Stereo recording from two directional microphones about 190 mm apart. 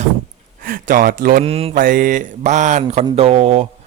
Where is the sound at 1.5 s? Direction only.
30° right (ahead or behind).